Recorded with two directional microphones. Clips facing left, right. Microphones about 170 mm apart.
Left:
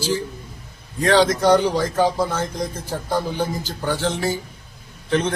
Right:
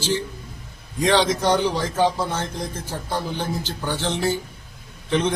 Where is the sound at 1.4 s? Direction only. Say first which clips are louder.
Left 4 dB; 10° left (ahead or behind).